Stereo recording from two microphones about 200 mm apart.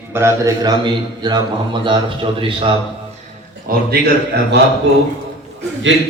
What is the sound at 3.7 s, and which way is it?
Speech, 55° right (ahead or behind).